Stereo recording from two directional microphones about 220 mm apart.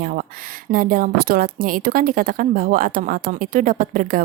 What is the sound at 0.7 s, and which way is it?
A woman's voice, 40° right (ahead or behind).